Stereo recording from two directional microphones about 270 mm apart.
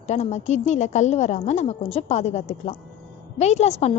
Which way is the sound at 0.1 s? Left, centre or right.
Left.